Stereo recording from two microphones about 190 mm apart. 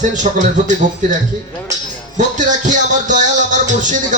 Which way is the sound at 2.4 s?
40° right (ahead or behind).